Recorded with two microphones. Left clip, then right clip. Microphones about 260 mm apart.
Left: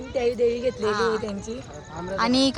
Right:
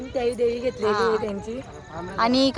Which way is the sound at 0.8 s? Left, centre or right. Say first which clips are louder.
Right 4 dB; centre.